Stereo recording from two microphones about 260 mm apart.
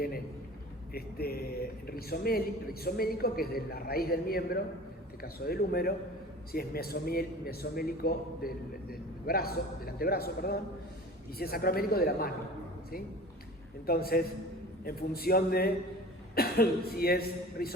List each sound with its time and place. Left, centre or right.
0.9 s a man's voice: left
13.8 s a man's voice: left